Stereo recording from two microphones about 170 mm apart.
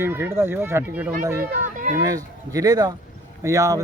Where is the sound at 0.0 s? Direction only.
15° right (ahead or behind).